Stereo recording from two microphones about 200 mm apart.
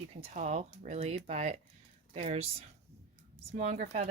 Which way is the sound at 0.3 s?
35° right (ahead or behind).